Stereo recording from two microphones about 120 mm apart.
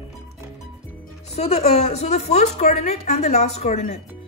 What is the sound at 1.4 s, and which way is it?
A woman's voice, 65° left (ahead or behind).